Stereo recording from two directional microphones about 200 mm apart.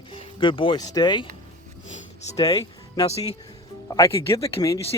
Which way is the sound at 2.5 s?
30° left (ahead or behind).